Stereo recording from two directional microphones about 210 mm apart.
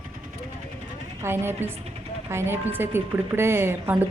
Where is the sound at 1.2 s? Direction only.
10° right (ahead or behind).